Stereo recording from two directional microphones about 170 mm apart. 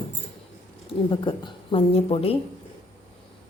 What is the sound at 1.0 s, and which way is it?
A woman's voice, 30° left (ahead or behind).